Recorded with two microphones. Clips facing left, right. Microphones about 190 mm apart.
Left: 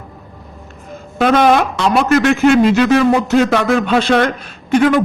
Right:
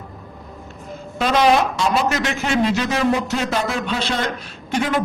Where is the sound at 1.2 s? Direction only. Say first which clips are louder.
Left 5 dB; 55° left (ahead or behind).